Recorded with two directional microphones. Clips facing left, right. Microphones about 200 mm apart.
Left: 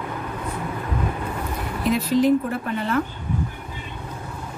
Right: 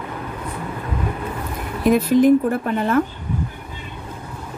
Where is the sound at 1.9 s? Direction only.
50° right (ahead or behind).